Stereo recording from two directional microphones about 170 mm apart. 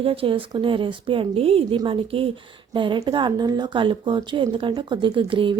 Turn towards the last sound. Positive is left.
turn(degrees=-30)  # may be behind; listen again after turning